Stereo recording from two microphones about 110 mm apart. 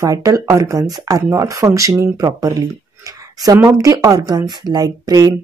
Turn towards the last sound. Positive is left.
turn(degrees=-35)  # may be behind; listen again after turning